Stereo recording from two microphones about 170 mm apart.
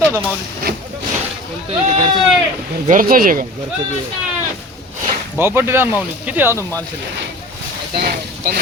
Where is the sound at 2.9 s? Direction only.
55° right (ahead or behind).